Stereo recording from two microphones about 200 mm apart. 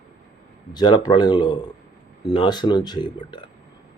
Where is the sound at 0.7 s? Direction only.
20° left (ahead or behind).